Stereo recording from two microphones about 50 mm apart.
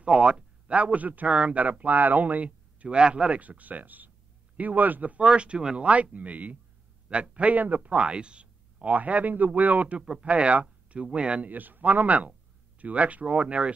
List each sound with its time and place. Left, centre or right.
0.0 s a man's voice: right
5.2 s a man's voice: right
6.1 s a man's voice: right
11.5 s a man's voice: right